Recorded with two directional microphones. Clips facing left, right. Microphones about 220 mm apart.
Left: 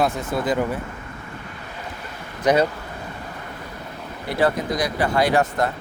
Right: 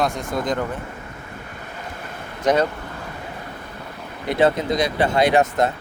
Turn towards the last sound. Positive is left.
turn(degrees=-20)  # may be behind; listen again after turning